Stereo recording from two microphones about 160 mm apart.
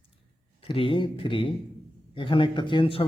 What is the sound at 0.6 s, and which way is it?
Speech, 35° left (ahead or behind).